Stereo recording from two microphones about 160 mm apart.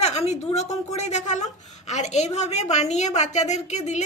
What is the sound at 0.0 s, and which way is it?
A woman's voice, 40° left (ahead or behind).